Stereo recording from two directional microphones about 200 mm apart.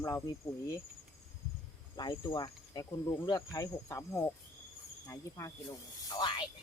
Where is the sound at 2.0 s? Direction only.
20° left (ahead or behind).